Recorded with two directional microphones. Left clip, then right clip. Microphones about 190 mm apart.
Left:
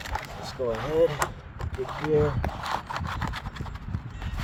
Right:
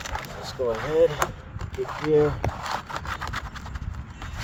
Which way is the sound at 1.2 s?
20° right (ahead or behind).